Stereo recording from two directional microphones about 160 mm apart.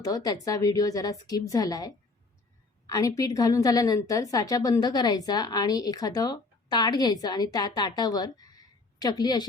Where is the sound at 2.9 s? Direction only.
20° left (ahead or behind).